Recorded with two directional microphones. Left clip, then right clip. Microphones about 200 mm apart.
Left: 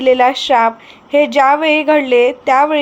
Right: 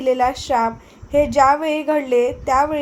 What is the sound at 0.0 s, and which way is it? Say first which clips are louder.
A woman's voice: left 7 dB; 25° left (ahead or behind).